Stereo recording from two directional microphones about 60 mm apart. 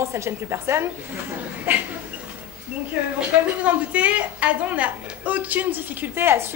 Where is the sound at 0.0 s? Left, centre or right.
Right.